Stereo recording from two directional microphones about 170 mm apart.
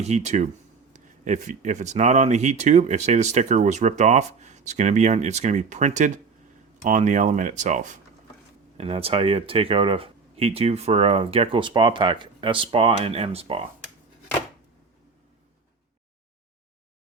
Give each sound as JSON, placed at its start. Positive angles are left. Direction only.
{"t": 0.0, "sound": "speech", "side_deg": -40}
{"t": 8.8, "sound": "speech", "side_deg": -35}